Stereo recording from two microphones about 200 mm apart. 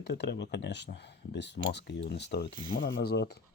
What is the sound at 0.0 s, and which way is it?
Speech, 55° left (ahead or behind).